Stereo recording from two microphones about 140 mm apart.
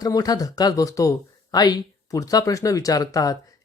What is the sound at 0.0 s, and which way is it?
Speech, 25° left (ahead or behind).